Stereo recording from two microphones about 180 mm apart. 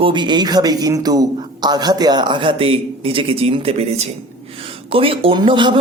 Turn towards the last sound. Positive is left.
turn(degrees=-25)  # may be behind; listen again after turning